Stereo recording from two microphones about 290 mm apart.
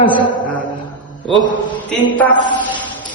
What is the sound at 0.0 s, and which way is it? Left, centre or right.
Speech, centre.